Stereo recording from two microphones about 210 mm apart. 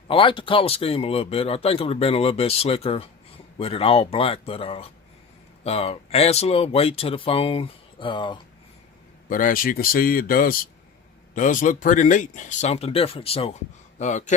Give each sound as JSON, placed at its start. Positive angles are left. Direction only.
{"t": 0.1, "sound": "speech", "side_deg": 25}
{"t": 9.3, "sound": "speech", "side_deg": 40}